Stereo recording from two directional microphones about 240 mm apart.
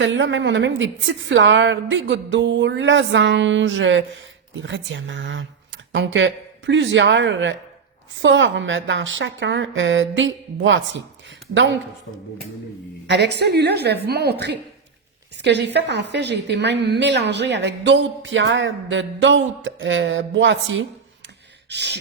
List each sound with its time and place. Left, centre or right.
0.0 s a woman's voice: right
13.1 s a woman's voice: right